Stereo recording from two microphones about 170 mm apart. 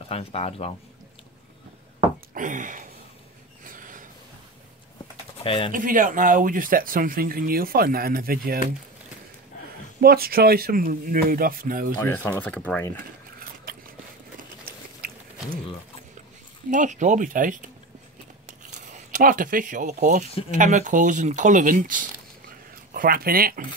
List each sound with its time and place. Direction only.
0.1 s speech: 35° left (ahead or behind)
2.3 s a sound: 50° right (ahead or behind)
3.6 s snort: 50° right (ahead or behind)
5.4 s speech: 30° left (ahead or behind)
5.7 s speech: 55° right (ahead or behind)
9.9 s speech: 65° right (ahead or behind)
12.0 s speech: 10° left (ahead or behind)
13.4 s a sound: 55° right (ahead or behind)
16.7 s speech: 45° right (ahead or behind)
18.8 s speech: 45° right (ahead or behind)